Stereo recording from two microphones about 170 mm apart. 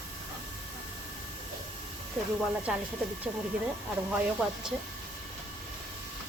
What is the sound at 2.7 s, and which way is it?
Speech, 5° right (ahead or behind).